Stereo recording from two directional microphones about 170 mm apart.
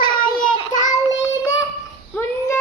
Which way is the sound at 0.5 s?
30° left (ahead or behind).